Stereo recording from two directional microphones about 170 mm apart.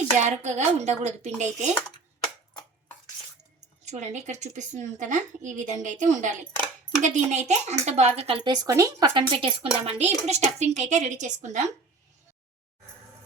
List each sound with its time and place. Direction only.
0.2 s a woman's voice: 40° right (ahead or behind)
3.8 s a woman's voice: 45° right (ahead or behind)
8.6 s a woman's voice: 20° right (ahead or behind); by 11.7 s 45° right (ahead or behind)